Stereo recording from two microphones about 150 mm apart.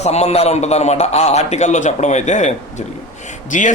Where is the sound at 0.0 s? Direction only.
45° left (ahead or behind).